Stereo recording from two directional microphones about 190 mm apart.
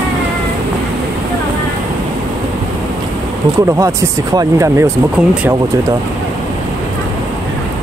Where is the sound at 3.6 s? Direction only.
15° right (ahead or behind).